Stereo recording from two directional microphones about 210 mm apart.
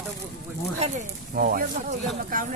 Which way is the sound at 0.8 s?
40° right (ahead or behind).